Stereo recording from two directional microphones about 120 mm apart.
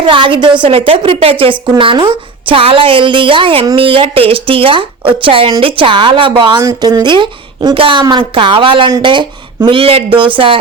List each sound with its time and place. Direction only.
0.1 s a woman's voice: 45° right (ahead or behind)